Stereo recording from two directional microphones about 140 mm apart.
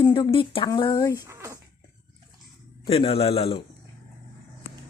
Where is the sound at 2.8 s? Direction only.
40° left (ahead or behind).